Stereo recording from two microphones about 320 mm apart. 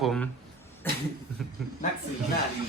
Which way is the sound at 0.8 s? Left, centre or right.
Centre.